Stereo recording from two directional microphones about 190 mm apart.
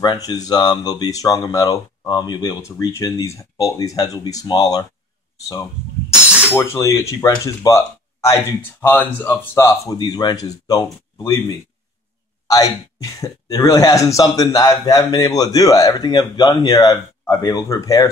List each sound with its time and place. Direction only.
0.3 s speech: 20° left (ahead or behind)
6.5 s speech: 15° left (ahead or behind)
8.8 s speech: 10° left (ahead or behind)